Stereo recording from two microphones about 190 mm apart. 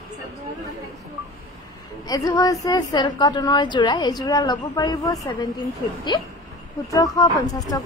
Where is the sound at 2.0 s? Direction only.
20° left (ahead or behind).